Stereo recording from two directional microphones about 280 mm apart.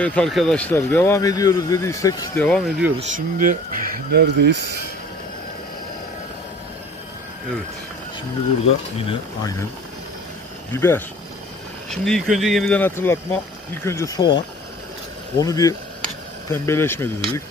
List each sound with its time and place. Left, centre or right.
0.0 s speech: centre
3.0 s speech: right
8.9 s speech: centre
10.7 s speech: centre
15.4 s speech: centre